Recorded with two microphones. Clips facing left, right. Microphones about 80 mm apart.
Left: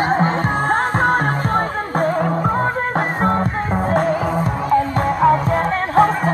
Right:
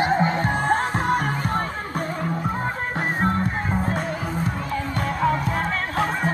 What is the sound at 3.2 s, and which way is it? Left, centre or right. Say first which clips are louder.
Music: left 5 dB; left.